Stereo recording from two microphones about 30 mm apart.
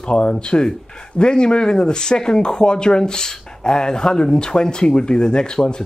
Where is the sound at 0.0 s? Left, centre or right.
Left.